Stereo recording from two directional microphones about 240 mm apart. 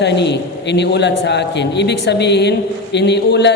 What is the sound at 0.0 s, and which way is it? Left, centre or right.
A man's voice, left.